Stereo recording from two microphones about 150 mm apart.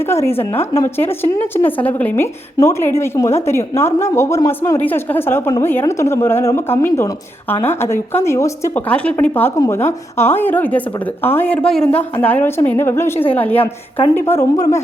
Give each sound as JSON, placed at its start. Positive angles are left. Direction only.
{"t": 0.1, "sound": "a woman's voice", "side_deg": 15}
{"t": 8.9, "sound": "a woman's voice", "side_deg": 10}